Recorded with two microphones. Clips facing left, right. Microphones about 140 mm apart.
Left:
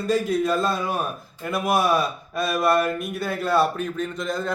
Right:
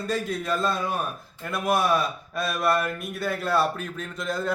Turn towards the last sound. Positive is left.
turn(degrees=-5)  # may be behind; listen again after turning